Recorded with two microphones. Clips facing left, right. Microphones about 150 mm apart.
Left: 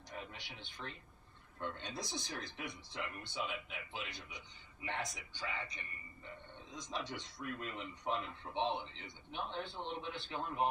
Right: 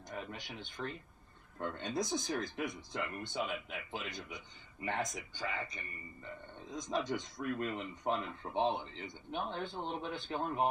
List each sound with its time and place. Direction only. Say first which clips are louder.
0.1 s speech: right 5 dB; 45° right (ahead or behind)